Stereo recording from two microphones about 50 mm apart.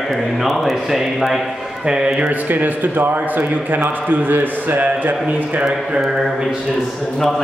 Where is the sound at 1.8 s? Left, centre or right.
Centre.